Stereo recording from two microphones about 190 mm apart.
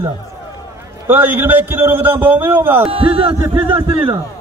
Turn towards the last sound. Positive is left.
turn(degrees=-25)  # may be behind; listen again after turning